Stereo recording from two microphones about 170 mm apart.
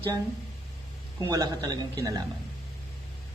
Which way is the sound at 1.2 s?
20° right (ahead or behind).